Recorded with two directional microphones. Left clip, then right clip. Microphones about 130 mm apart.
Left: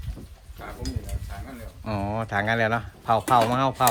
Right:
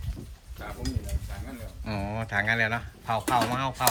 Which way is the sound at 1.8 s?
20° left (ahead or behind).